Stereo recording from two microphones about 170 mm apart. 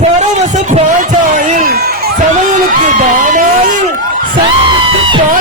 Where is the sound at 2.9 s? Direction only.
50° right (ahead or behind).